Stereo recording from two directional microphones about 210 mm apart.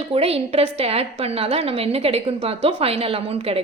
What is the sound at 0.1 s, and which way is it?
A woman's voice, 30° right (ahead or behind).